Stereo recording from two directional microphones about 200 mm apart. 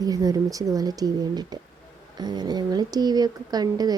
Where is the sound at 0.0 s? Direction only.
20° right (ahead or behind).